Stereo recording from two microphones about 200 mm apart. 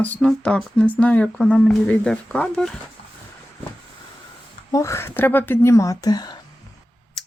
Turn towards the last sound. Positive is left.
turn(degrees=5)  # may be behind; listen again after turning